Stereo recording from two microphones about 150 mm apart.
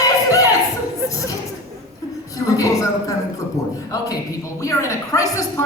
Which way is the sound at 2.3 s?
20° left (ahead or behind).